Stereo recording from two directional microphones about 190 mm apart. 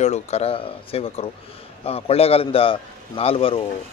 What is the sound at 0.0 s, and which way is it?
A man's voice, 35° left (ahead or behind).